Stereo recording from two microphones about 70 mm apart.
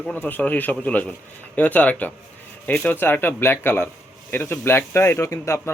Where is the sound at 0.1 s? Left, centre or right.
Left.